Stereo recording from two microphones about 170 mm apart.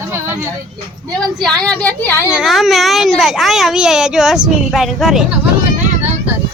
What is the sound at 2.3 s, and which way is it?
A child's voice, 5° right (ahead or behind).